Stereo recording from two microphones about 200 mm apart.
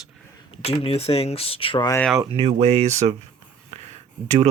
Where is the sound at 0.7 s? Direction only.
30° left (ahead or behind).